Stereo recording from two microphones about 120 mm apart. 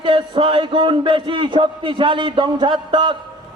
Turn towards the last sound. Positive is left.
turn(degrees=-40)  # may be behind; listen again after turning